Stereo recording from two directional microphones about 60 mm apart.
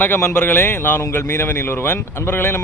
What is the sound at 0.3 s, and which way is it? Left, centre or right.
Speech, left.